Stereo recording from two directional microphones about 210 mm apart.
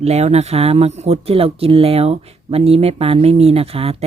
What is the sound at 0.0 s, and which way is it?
Speech, 30° right (ahead or behind).